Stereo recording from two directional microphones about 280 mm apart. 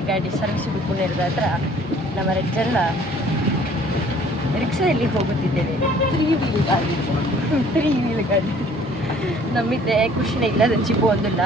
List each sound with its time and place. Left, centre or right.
9.8 s speech: centre